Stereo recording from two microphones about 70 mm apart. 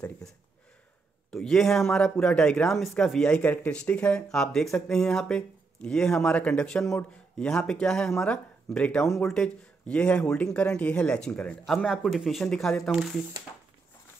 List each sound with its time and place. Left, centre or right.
1.3 s speech: centre
11.6 s speech: centre